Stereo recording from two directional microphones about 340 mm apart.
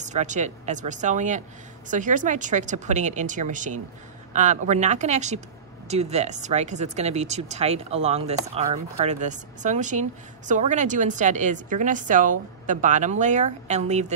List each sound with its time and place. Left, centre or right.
0.0 s speech: right